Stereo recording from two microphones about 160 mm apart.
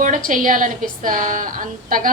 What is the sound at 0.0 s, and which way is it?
A woman's voice, 55° right (ahead or behind).